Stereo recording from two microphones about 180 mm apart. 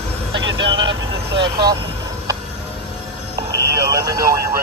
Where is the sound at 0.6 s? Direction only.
25° right (ahead or behind).